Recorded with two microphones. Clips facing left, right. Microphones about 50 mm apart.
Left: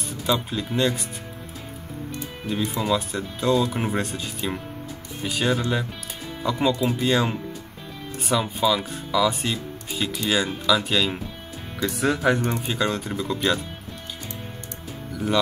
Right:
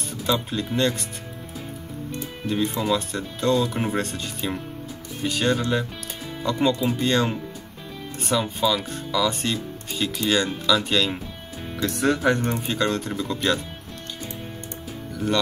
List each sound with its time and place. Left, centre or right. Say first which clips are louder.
0.1 s speech: even; centre
2.4 s speech: right 2 dB; centre